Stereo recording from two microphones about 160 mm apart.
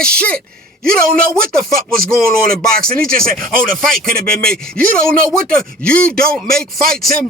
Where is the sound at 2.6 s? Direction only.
5° left (ahead or behind).